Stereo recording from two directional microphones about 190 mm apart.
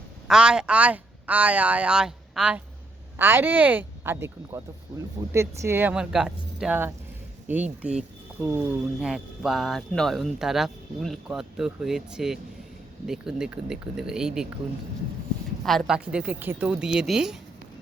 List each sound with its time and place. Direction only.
0.3 s speech: 5° right (ahead or behind)
15.6 s speech: centre (ahead or behind)